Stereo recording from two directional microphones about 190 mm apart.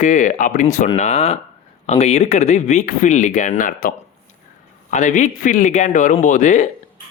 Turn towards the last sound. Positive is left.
turn(degrees=40)  # may be behind; listen again after turning